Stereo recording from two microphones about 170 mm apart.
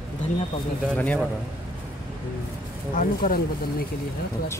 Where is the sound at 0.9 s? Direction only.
10° left (ahead or behind).